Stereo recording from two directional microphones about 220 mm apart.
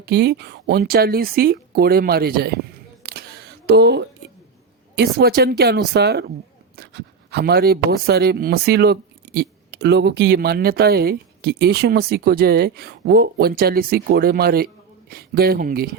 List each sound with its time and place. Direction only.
0.0 s speech: 50° right (ahead or behind)
3.0 s single-lens reflex camera: 45° right (ahead or behind)
4.9 s speech: 45° right (ahead or behind)